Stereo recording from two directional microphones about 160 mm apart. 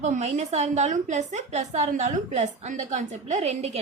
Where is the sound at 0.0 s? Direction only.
45° right (ahead or behind).